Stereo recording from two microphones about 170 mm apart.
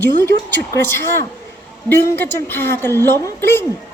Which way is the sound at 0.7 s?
15° left (ahead or behind).